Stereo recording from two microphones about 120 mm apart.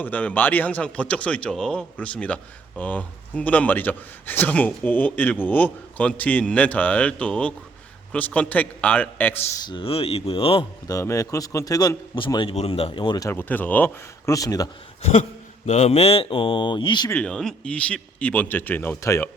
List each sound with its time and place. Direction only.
0.0 s speech: 15° left (ahead or behind)
9.6 s speech: 45° left (ahead or behind)
10.8 s a man's voice: 25° left (ahead or behind)
13.2 s speech: 15° left (ahead or behind)
14.3 s speech: 30° left (ahead or behind)
15.0 s speech: 70° left (ahead or behind); by 17.1 s 40° left (ahead or behind)
17.2 s speech: 5° left (ahead or behind)